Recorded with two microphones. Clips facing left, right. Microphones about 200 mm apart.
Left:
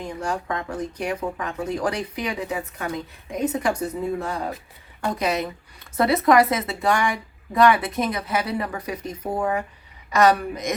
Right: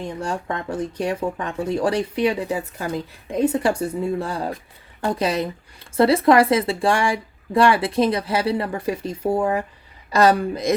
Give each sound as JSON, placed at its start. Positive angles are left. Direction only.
{"t": 0.0, "sound": "speech", "side_deg": -30}